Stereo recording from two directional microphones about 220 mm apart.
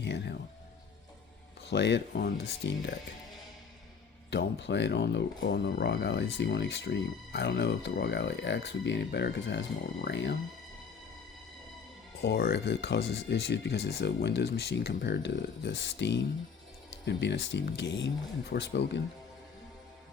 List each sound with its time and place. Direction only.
0.0 s speech: 50° left (ahead or behind)
1.7 s speech: 55° left (ahead or behind)
4.3 s speech: 50° left (ahead or behind)
12.2 s speech: 45° left (ahead or behind)